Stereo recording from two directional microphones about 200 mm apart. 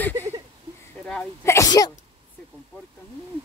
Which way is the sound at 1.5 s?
15° left (ahead or behind).